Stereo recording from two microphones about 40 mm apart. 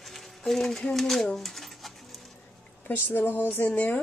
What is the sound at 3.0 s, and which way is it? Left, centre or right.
Speech, left.